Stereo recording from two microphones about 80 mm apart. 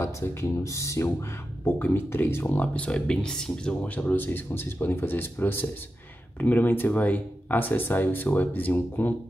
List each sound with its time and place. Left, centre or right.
0.0 s speech: left
1.6 s speech: left; by 3.7 s centre
3.8 s speech: centre